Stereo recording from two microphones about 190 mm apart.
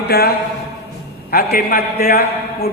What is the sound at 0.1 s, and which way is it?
A man's voice, 55° left (ahead or behind).